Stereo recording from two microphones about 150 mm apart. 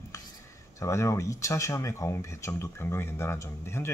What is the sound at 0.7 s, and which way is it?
Speech, 20° left (ahead or behind).